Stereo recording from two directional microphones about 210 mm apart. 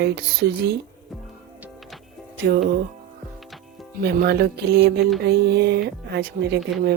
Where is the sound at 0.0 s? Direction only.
50° right (ahead or behind).